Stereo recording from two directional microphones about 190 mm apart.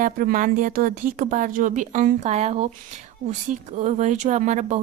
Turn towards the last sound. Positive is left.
turn(degrees=-40)  # may be behind; listen again after turning